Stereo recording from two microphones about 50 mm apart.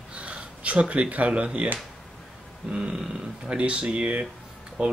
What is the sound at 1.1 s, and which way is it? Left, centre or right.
Speech, right.